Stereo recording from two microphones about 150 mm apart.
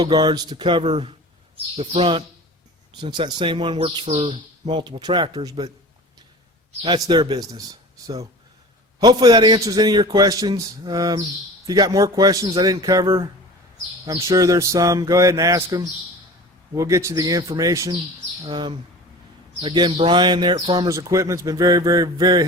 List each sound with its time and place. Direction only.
0.0 s speech: 30° right (ahead or behind)
6.8 s a man's voice: 30° right (ahead or behind)